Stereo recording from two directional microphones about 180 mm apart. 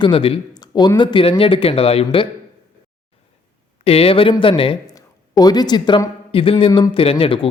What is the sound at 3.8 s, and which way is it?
Speech, 30° left (ahead or behind).